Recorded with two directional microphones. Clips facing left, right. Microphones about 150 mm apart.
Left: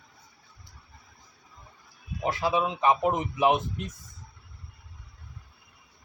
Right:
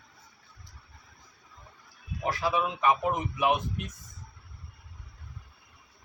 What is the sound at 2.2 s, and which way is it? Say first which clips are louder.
A man's voice: left 2 dB; 25° left (ahead or behind).